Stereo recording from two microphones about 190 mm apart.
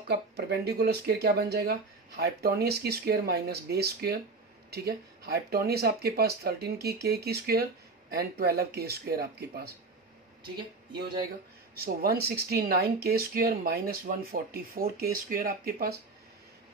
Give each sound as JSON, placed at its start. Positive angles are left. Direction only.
{"t": 0.1, "sound": "speech", "side_deg": -55}
{"t": 11.8, "sound": "speech", "side_deg": -55}